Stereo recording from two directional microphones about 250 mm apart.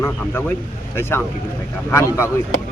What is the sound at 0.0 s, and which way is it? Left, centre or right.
Speech, centre.